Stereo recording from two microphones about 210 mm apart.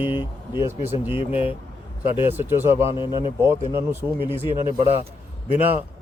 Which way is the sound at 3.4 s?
10° right (ahead or behind).